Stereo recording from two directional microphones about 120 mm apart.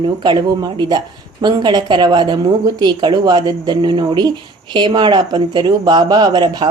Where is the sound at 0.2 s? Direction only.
35° right (ahead or behind).